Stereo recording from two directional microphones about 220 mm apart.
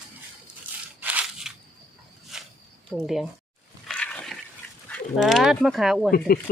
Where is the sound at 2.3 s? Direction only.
Centre (ahead or behind).